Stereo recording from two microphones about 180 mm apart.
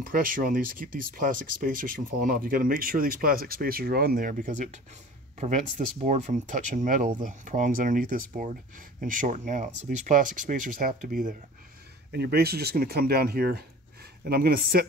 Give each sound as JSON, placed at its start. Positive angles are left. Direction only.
{"t": 0.1, "sound": "speech", "side_deg": -50}
{"t": 12.1, "sound": "speech", "side_deg": -65}